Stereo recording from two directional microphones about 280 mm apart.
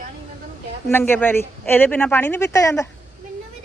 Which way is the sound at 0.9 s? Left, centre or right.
Centre.